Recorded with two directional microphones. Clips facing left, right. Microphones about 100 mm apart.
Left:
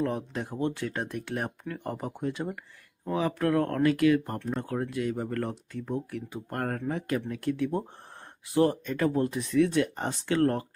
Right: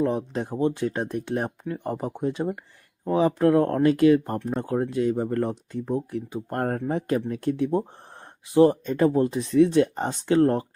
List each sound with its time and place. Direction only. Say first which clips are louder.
0.0 s speech: right 5 dB; 25° right (ahead or behind)